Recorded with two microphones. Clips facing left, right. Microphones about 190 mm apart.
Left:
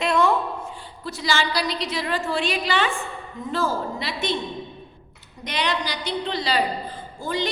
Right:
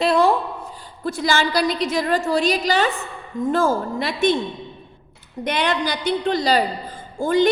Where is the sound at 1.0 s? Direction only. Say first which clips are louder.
Right 4 dB; 50° right (ahead or behind).